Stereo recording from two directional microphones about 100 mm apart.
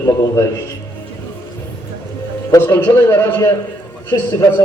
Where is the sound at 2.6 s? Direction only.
20° left (ahead or behind).